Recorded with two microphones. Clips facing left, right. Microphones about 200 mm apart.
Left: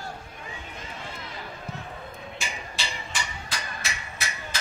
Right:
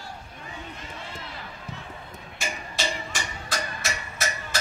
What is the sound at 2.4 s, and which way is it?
Music, 45° right (ahead or behind).